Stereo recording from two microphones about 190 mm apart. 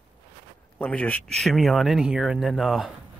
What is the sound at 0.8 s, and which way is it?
Speech, 5° left (ahead or behind).